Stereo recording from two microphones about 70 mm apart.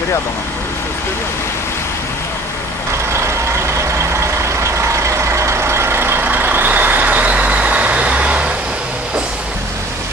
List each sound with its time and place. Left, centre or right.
5.0 s vehicle: right; by 8.5 s centre